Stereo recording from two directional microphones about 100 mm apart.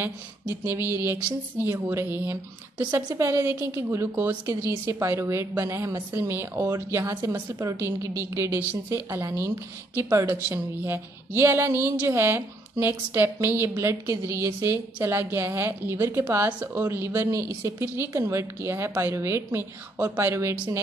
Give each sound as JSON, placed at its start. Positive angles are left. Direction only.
{"t": 0.0, "sound": "a woman's voice", "side_deg": -20}